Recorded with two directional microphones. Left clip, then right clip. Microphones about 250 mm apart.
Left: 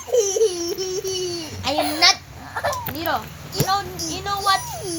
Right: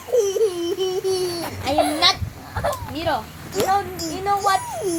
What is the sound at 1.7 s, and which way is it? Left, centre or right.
Speech, left.